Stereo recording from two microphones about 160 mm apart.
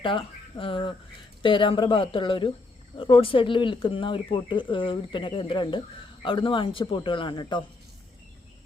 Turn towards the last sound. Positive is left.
turn(degrees=30)  # may be behind; listen again after turning